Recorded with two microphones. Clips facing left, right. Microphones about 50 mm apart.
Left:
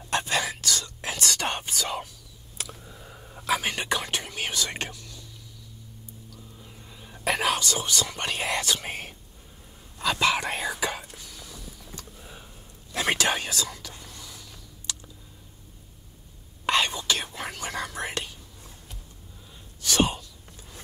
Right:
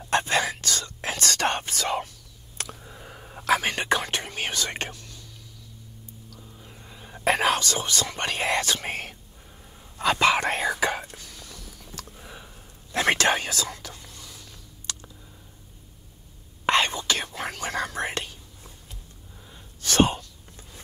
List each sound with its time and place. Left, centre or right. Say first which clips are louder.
0.1 s whispering: right 3 dB; right
2.8 s a sound: right 2 dB; right
3.1 s whispering: right 4 dB; right
6.6 s a sound: right 1 dB; centre
7.2 s whispering: right 3 dB; right
12.2 s a sound: right 2 dB; right
12.9 s whispering: right 3 dB; right
16.6 s whispering: right 2 dB; right
19.8 s whispering: right 3 dB; right